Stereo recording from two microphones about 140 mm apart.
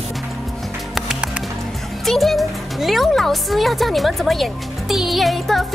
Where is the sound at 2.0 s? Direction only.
Centre (ahead or behind).